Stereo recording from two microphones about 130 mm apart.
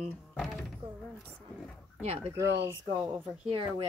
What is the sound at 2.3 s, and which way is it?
Speech, 20° right (ahead or behind).